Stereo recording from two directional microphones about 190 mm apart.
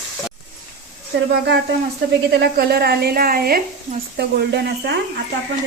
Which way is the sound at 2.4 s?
55° right (ahead or behind).